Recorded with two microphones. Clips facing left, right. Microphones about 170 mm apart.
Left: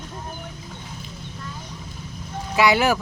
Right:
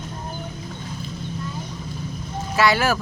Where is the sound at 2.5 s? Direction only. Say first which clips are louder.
Left 1 dB; 15° left (ahead or behind).